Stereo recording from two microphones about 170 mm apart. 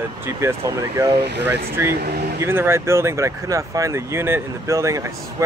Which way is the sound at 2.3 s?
15° right (ahead or behind).